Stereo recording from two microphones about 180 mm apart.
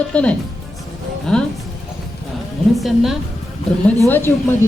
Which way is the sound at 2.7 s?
Centre (ahead or behind).